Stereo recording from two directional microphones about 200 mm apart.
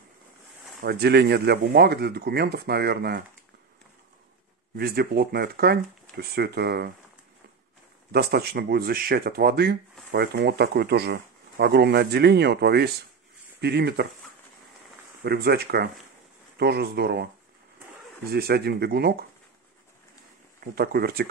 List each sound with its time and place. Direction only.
0.8 s speech: 55° right (ahead or behind)
4.7 s speech: 50° right (ahead or behind)
8.1 s speech: 50° right (ahead or behind)
15.2 s speech: 50° right (ahead or behind)
20.6 s speech: 50° right (ahead or behind)